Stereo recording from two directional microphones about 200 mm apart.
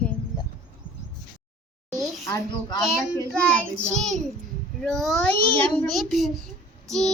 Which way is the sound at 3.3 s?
5° left (ahead or behind).